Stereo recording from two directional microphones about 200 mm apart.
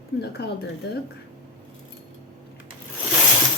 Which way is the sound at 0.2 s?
55° left (ahead or behind).